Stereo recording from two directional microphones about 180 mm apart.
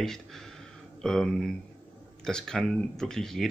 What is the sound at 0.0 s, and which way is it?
Speech, centre (ahead or behind).